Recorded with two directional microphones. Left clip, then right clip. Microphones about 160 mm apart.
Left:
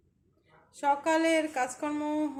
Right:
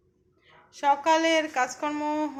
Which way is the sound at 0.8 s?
15° left (ahead or behind).